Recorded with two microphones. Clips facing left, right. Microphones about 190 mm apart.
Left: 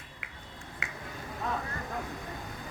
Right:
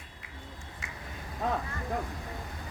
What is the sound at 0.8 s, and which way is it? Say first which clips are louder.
Finger snapping: left 4 dB; 65° left (ahead or behind).